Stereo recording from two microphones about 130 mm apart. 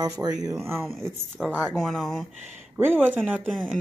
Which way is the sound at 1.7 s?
Centre (ahead or behind).